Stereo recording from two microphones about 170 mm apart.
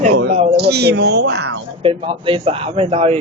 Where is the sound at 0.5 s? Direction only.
70° right (ahead or behind); by 1.6 s 90° right.